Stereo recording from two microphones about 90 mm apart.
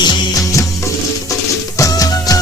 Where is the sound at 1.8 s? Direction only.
40° left (ahead or behind).